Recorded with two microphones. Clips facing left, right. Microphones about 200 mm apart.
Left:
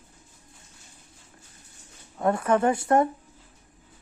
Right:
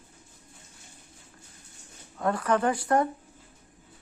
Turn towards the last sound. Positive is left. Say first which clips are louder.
# left 3 dB
turn(degrees=25)  # may be behind; listen again after turning